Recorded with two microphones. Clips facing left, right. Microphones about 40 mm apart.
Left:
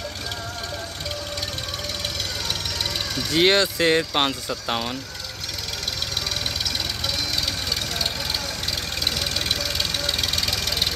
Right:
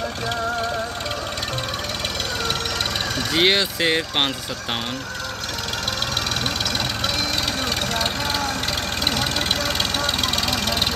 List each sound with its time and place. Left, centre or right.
3.3 s speech: centre
9.9 s vehicle: right